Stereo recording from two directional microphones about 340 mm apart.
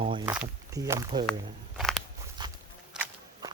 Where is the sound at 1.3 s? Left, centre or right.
Centre.